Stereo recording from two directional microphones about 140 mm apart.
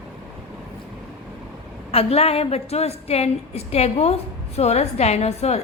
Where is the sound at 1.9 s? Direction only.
45° left (ahead or behind).